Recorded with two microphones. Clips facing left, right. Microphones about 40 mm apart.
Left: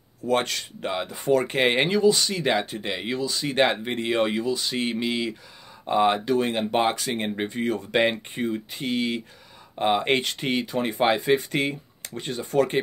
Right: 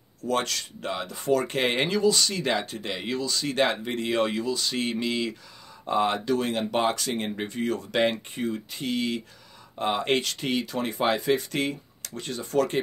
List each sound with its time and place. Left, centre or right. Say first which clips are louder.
0.2 s speech: left 3 dB; left